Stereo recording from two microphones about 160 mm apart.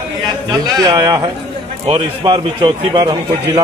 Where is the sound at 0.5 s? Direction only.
25° right (ahead or behind).